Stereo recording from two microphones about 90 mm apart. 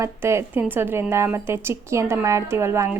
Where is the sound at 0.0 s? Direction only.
30° right (ahead or behind).